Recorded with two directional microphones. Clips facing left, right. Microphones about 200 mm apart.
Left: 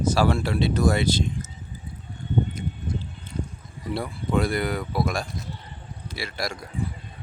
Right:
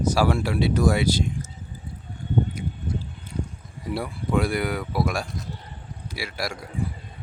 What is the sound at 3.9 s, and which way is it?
Speech, 10° right (ahead or behind).